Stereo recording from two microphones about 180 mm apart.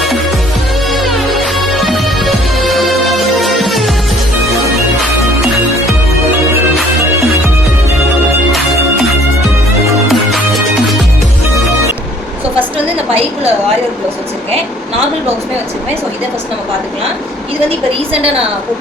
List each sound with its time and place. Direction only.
0.9 s music: centre (ahead or behind)
6.7 s music: centre (ahead or behind)
8.5 s music: centre (ahead or behind)
12.5 s a sound: 30° right (ahead or behind)
17.7 s a woman's voice: 35° right (ahead or behind)